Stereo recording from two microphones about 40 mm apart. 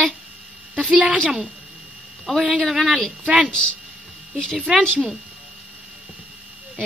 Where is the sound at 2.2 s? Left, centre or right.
Centre.